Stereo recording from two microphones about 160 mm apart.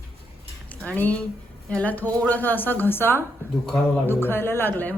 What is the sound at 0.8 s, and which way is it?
A woman's voice, 10° left (ahead or behind).